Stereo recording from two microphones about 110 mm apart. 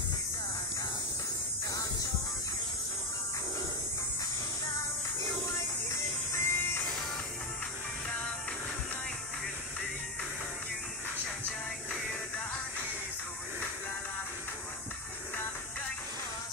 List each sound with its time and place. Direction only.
5.9 s music: 25° left (ahead or behind)